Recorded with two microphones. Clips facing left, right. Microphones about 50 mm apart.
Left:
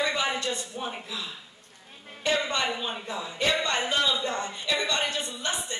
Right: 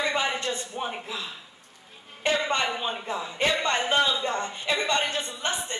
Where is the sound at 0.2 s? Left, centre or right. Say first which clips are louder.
Right 1 dB; right.